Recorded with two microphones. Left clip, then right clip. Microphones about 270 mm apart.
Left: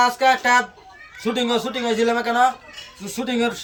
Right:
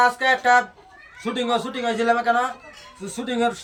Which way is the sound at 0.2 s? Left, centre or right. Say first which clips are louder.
Left 1 dB; centre.